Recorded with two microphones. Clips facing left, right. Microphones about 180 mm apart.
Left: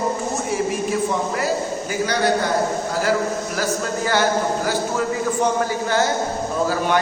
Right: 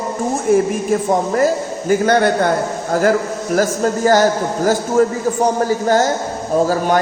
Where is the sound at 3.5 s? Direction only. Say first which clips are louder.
Right 7 dB; 45° right (ahead or behind).